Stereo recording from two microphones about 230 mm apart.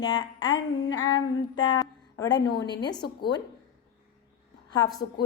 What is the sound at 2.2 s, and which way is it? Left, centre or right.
Speech, centre.